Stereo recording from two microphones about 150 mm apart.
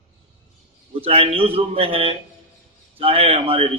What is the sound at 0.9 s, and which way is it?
A man's voice, 40° right (ahead or behind).